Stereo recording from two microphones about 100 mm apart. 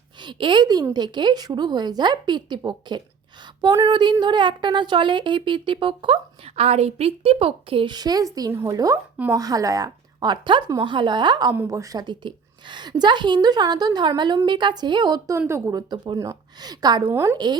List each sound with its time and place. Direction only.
0.2 s a woman's voice: 50° right (ahead or behind)
7.9 s a woman's voice: 40° right (ahead or behind)
11.7 s a woman's voice: 35° right (ahead or behind)
15.3 s a woman's voice: 25° right (ahead or behind)
15.7 s a woman's voice: 40° right (ahead or behind)
17.1 s a woman's voice: 25° right (ahead or behind)
17.3 s a woman's voice: 45° right (ahead or behind)